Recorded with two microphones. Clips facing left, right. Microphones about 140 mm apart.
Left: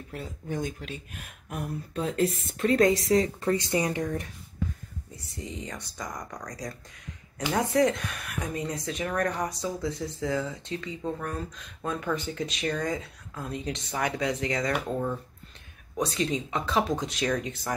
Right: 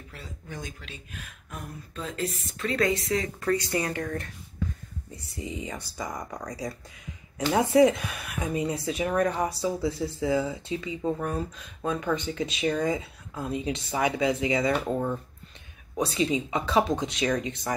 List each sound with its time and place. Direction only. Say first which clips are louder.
0.1 s speech: left 8 dB; 50° left (ahead or behind)
2.5 s speech: left 4 dB; 40° left (ahead or behind)
3.3 s speech: even; 25° left (ahead or behind)
5.1 s speech: right 3 dB; centre (ahead or behind)